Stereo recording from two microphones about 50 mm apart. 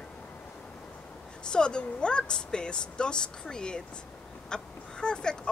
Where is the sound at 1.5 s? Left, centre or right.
Centre.